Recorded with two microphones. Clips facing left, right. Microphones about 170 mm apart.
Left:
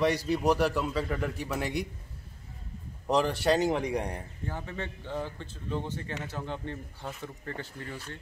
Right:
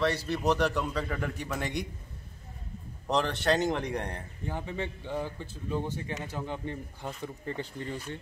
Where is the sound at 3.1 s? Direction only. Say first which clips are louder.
Left 2 dB; 10° left (ahead or behind).